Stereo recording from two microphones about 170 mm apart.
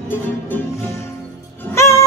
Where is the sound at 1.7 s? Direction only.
15° left (ahead or behind).